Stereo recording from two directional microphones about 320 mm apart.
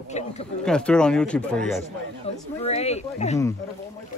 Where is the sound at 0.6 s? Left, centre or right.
Centre.